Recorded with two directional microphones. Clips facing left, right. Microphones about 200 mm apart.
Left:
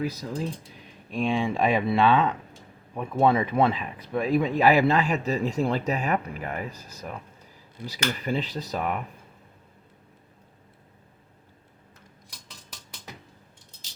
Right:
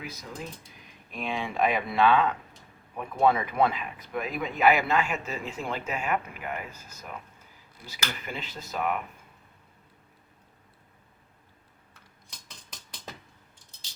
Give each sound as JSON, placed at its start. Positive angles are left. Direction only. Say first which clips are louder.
{"t": 0.0, "sound": "speech", "louder": "left 9 dB", "side_deg": 35}